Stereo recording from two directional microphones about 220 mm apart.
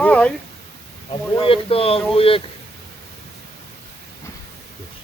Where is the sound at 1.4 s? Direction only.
25° left (ahead or behind).